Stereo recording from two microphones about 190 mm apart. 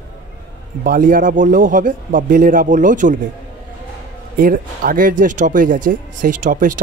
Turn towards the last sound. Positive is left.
turn(degrees=-45)  # may be behind; listen again after turning